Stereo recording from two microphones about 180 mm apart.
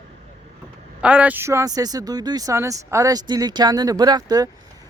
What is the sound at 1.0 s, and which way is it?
Speech, 10° right (ahead or behind).